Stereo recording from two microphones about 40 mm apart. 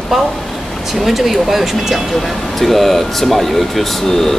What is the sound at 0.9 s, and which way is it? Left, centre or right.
Speech, centre.